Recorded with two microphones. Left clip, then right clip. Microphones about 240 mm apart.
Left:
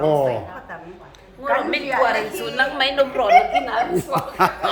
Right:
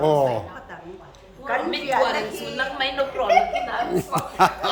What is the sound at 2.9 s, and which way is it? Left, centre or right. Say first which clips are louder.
Speech: left 6 dB; left.